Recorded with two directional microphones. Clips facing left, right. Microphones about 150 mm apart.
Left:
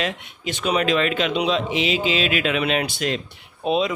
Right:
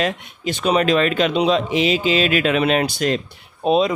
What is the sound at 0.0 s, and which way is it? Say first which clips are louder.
Speech: right 4 dB; 40° right (ahead or behind).